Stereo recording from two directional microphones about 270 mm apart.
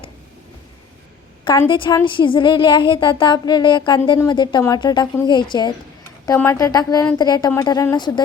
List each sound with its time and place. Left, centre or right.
1.5 s a woman's voice: centre